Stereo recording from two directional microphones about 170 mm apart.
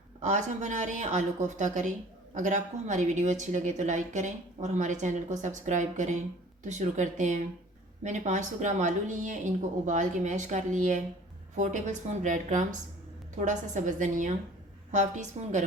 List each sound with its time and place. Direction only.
0.2 s speech: 45° right (ahead or behind)